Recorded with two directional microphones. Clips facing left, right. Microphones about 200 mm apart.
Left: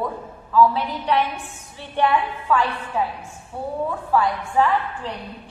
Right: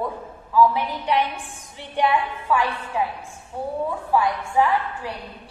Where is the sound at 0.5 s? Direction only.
15° right (ahead or behind).